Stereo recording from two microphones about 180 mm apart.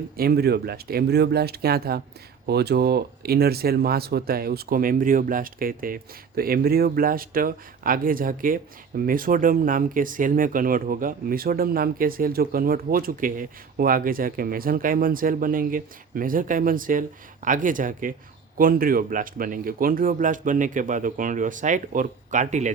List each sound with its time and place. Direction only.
0.2 s speech: 60° right (ahead or behind); by 22.7 s 40° right (ahead or behind)